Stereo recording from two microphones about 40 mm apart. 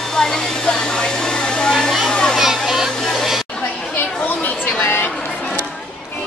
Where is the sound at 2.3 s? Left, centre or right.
Centre.